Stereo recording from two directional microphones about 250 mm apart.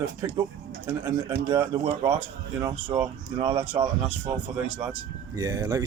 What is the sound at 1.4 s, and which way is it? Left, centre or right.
Speech, centre.